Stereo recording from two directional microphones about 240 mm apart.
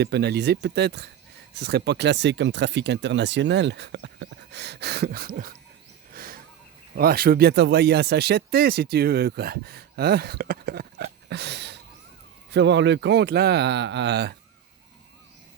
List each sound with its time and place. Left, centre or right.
0.0 s speech: right
6.1 s a sound: right
6.9 s speech: right